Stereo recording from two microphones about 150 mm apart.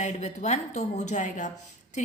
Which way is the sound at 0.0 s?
50° left (ahead or behind).